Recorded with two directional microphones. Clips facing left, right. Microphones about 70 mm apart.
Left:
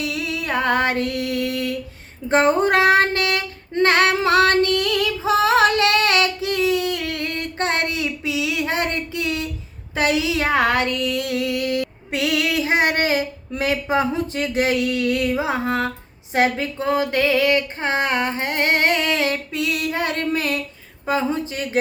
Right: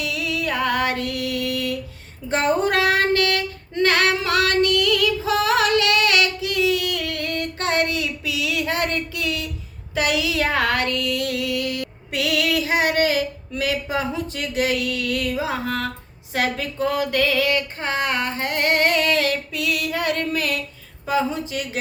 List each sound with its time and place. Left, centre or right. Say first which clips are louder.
0.0 s music: even; left
2.3 s female singing: left 3 dB; left
21.1 s speech: left 1 dB; left